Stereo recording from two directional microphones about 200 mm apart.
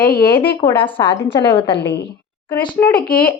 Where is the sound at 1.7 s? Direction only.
55° left (ahead or behind).